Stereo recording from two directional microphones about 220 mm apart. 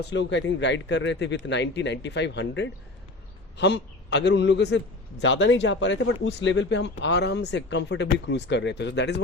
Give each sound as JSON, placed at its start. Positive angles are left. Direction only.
{"t": 0.0, "sound": "speech", "side_deg": 50}